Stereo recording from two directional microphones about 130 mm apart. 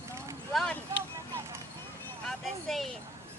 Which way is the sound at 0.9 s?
20° right (ahead or behind).